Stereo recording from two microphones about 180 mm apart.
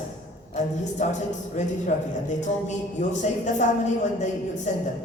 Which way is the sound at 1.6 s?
40° left (ahead or behind).